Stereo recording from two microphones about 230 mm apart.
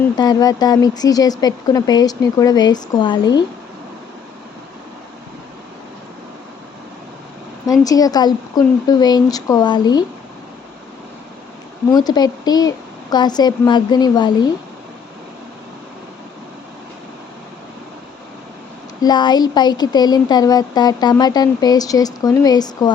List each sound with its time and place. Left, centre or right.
0.2 s speech: centre
7.7 s speech: centre
11.9 s speech: centre
19.0 s speech: centre